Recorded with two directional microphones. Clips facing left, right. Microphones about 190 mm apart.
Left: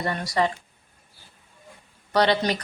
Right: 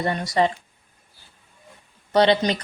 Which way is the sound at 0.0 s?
25° right (ahead or behind).